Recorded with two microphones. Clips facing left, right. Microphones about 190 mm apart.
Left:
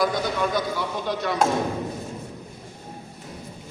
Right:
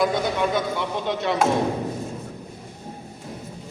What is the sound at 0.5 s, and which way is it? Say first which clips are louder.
Speech: right 1 dB; 25° right (ahead or behind).